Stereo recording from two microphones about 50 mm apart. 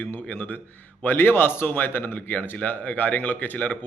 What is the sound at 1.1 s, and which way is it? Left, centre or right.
Speech, left.